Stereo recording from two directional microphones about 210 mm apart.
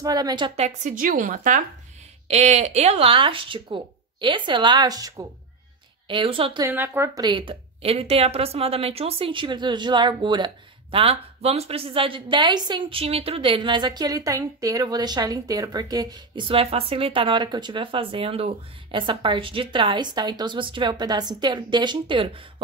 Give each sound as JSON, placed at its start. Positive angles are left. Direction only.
{"t": 0.0, "sound": "a woman's voice", "side_deg": -15}
{"t": 0.6, "sound": "a woman's voice", "side_deg": -35}
{"t": 6.7, "sound": "a woman's voice", "side_deg": -10}